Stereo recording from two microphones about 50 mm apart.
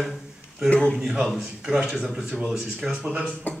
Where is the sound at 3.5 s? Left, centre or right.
Left.